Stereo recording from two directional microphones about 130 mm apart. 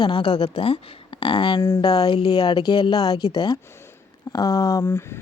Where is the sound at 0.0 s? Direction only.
45° left (ahead or behind).